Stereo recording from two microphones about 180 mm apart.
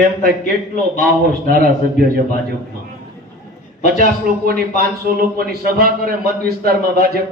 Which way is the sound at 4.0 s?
55° right (ahead or behind).